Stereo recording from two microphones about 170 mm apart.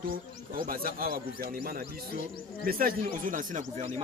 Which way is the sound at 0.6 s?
55° right (ahead or behind).